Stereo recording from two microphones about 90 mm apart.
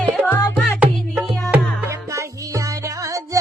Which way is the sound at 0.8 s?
15° right (ahead or behind).